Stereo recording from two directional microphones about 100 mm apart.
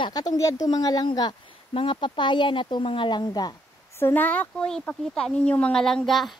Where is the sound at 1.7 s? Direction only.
55° left (ahead or behind).